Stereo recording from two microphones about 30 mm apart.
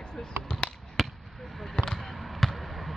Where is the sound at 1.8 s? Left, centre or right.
Left.